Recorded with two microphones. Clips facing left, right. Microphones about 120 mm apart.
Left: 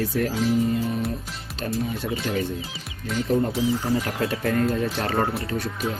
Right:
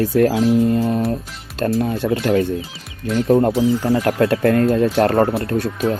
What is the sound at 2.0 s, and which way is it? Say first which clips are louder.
Speech: right 9 dB; 90° right.